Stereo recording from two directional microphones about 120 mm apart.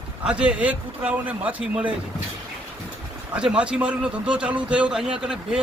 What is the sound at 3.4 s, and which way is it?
A man's voice, 10° right (ahead or behind).